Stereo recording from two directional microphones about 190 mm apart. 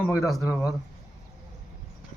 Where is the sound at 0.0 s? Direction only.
15° left (ahead or behind).